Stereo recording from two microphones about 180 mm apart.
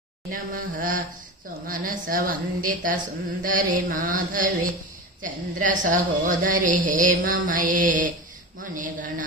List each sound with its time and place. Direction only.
0.3 s a woman's voice: 50° right (ahead or behind)